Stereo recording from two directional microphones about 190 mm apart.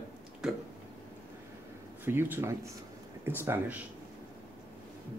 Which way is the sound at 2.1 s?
10° right (ahead or behind).